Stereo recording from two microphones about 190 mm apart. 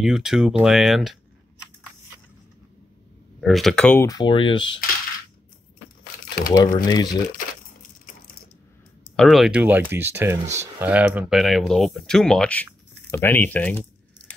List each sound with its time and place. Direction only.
0.0 s speech: 5° right (ahead or behind)
3.3 s speech: centre (ahead or behind); by 4.6 s 25° left (ahead or behind)
6.5 s speech: 20° left (ahead or behind)
9.1 s speech: centre (ahead or behind)